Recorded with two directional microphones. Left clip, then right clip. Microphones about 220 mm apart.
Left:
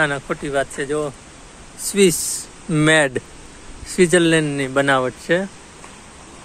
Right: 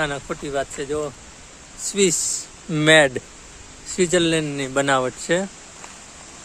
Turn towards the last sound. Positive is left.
turn(degrees=-10)  # may be behind; listen again after turning